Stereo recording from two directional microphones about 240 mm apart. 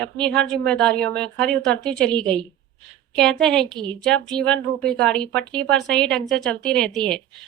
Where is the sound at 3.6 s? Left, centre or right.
Centre.